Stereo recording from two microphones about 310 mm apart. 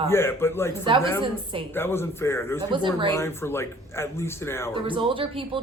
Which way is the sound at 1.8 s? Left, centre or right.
Centre.